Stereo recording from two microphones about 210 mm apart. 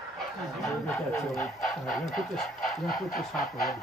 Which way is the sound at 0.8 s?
10° left (ahead or behind).